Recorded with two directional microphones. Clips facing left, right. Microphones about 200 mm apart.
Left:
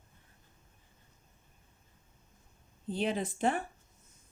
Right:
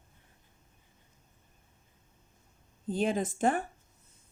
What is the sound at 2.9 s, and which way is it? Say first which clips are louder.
Speech: right 3 dB; 45° right (ahead or behind).